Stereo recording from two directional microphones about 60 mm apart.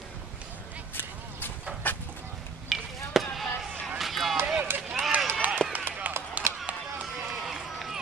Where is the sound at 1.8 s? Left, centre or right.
Left.